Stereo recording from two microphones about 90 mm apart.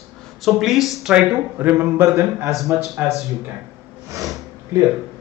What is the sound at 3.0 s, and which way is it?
Speech, 15° right (ahead or behind).